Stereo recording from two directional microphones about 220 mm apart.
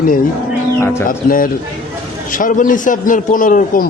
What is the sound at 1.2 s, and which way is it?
A man's voice, 40° left (ahead or behind).